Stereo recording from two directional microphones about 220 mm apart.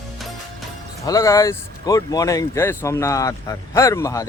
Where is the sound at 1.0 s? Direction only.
15° left (ahead or behind).